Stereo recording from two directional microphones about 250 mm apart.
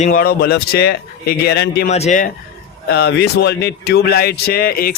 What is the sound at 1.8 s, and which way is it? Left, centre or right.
Speech, left.